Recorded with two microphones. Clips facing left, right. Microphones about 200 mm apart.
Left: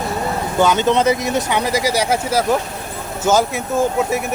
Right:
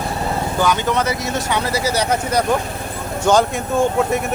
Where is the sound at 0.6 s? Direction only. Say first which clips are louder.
Left 5 dB; 20° left (ahead or behind).